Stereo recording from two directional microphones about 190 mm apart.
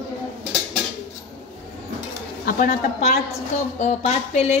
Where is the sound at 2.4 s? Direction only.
50° left (ahead or behind).